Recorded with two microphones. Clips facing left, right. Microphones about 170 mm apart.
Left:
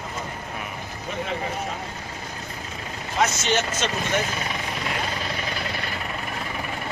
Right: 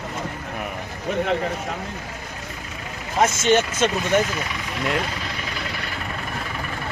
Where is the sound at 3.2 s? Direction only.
50° right (ahead or behind).